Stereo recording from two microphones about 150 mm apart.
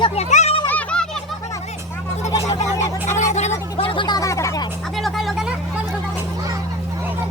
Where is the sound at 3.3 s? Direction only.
50° left (ahead or behind); by 4.6 s 20° left (ahead or behind).